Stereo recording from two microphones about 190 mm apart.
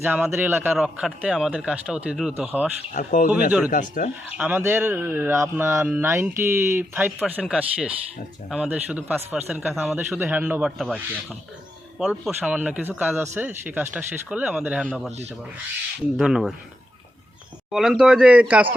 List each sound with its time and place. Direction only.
0.0 s speech: 10° right (ahead or behind)
2.9 s speech: 45° left (ahead or behind)
4.3 s a man's voice: 10° right (ahead or behind)
16.1 s a man's voice: centre (ahead or behind)
17.7 s a man's voice: centre (ahead or behind)